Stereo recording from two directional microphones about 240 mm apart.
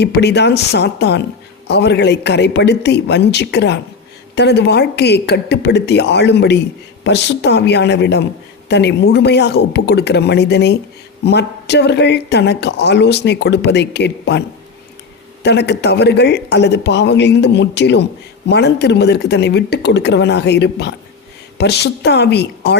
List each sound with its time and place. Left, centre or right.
0.0 s speech: left
15.4 s speech: left